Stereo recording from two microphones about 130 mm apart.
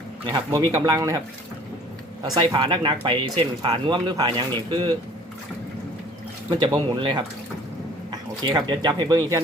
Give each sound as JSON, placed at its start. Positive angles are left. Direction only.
{"t": 0.7, "sound": "speech", "side_deg": -25}
{"t": 2.2, "sound": "speech", "side_deg": -30}
{"t": 6.6, "sound": "speech", "side_deg": -35}